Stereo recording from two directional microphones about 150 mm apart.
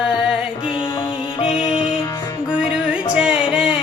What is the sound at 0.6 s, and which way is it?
Music, 35° left (ahead or behind).